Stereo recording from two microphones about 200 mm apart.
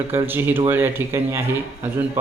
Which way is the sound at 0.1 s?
10° right (ahead or behind).